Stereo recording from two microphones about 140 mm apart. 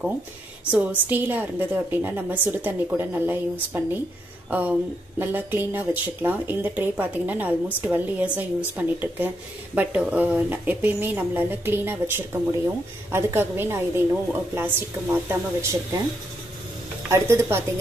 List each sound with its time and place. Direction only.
0.7 s speech: 10° right (ahead or behind)
17.1 s speech: 20° right (ahead or behind)